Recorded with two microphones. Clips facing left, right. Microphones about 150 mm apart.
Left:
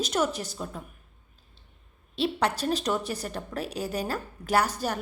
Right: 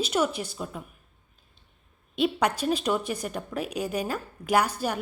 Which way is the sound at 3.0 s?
35° left (ahead or behind).